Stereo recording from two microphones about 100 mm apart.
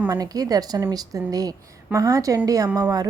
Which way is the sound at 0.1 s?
40° right (ahead or behind).